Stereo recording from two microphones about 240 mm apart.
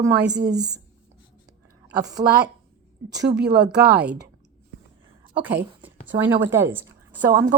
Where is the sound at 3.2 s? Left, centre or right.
Right.